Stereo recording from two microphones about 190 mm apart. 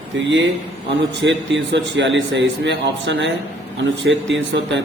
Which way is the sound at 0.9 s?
70° right (ahead or behind).